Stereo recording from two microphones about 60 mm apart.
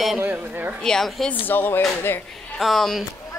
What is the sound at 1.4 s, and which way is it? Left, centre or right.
Speech, left.